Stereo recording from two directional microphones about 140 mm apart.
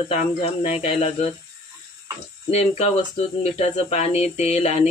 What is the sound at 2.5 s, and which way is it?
Speech, 50° left (ahead or behind).